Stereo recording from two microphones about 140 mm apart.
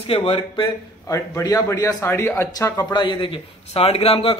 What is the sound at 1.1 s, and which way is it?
Speech, 20° left (ahead or behind).